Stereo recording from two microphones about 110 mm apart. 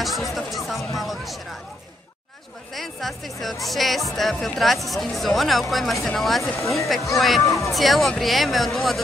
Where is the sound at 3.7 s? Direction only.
Centre (ahead or behind).